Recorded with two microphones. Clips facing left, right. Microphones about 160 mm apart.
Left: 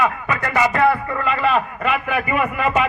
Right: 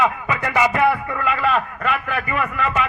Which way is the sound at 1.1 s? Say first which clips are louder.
Left 1 dB; centre (ahead or behind).